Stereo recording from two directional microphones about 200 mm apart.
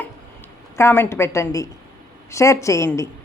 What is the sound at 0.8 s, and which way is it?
A woman's voice, 15° left (ahead or behind).